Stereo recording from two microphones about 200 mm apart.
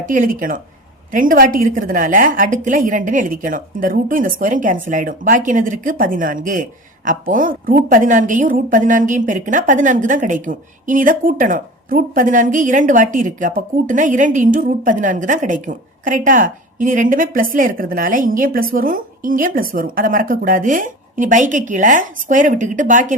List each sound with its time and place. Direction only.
0.0 s a woman's voice: 40° right (ahead or behind)